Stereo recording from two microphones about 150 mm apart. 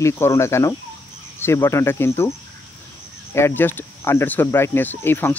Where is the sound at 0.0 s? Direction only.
20° left (ahead or behind).